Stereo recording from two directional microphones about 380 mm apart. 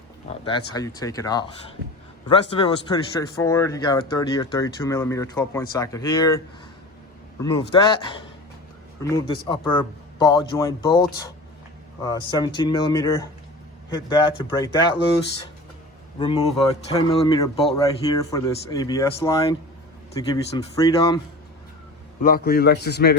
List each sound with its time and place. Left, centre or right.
0.3 s a man's voice: centre
7.9 s a man's voice: centre
12.0 s a man's voice: centre
16.1 s a man's voice: centre
22.2 s a man's voice: left